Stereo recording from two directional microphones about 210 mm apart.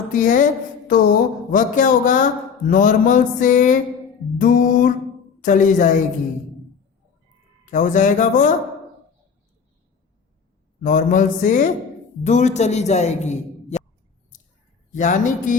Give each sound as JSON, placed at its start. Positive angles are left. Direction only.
{"t": 0.1, "sound": "speech", "side_deg": 40}
{"t": 7.6, "sound": "speech", "side_deg": 35}
{"t": 10.8, "sound": "speech", "side_deg": 35}
{"t": 14.9, "sound": "speech", "side_deg": 35}